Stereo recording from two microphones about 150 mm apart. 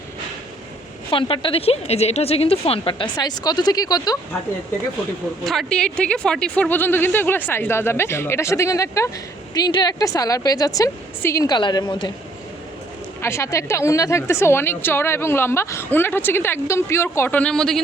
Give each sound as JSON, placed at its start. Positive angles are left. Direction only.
{"t": 1.1, "sound": "speech", "side_deg": 35}
{"t": 5.5, "sound": "a woman's voice", "side_deg": 5}
{"t": 13.2, "sound": "a woman's voice", "side_deg": 20}